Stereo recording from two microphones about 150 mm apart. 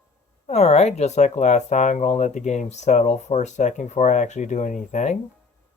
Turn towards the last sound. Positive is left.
turn(degrees=55)  # may be behind; listen again after turning